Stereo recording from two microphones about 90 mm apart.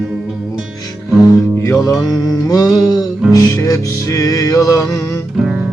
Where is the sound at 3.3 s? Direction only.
40° left (ahead or behind).